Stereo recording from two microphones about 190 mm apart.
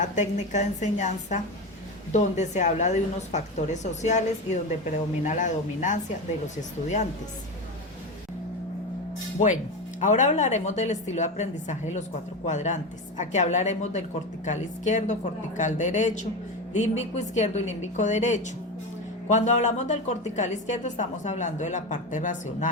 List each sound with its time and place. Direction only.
0.0 s a woman's voice: 40° left (ahead or behind)
10.0 s a woman's voice: 40° left (ahead or behind)